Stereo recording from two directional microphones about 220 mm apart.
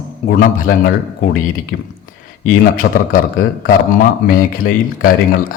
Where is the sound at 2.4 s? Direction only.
40° left (ahead or behind).